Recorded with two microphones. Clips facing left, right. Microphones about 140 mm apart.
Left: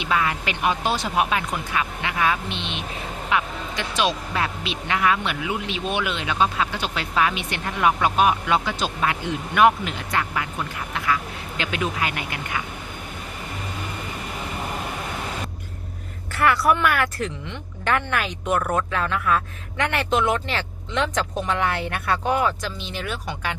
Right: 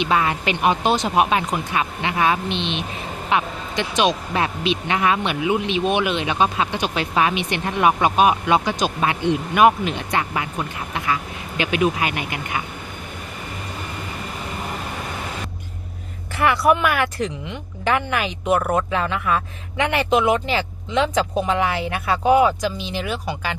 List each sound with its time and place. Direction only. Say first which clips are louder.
0.0 s speech: right 4 dB; 25° right (ahead or behind)
16.3 s speech: right 2 dB; 5° right (ahead or behind)